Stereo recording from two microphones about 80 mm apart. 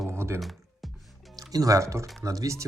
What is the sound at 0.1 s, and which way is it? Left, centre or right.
Music, right.